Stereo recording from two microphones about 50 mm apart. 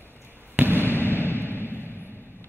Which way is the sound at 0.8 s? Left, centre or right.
Left.